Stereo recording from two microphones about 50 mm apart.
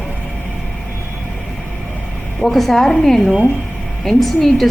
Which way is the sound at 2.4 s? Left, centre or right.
Centre.